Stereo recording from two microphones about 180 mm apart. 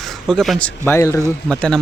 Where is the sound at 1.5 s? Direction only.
5° left (ahead or behind).